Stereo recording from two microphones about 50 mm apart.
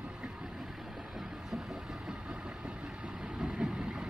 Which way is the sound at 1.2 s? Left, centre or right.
Centre.